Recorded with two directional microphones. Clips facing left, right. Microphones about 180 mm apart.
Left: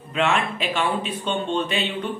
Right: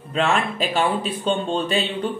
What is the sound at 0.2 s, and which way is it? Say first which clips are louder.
Speech: right 1 dB; 35° right (ahead or behind).